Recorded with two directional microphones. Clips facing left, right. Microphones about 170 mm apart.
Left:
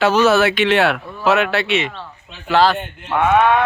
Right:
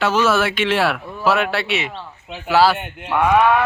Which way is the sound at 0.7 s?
5° right (ahead or behind).